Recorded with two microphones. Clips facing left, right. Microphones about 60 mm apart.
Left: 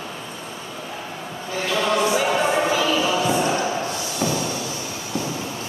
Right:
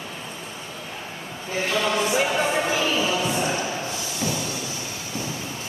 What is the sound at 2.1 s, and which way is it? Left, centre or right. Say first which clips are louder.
Music: left 2 dB; left.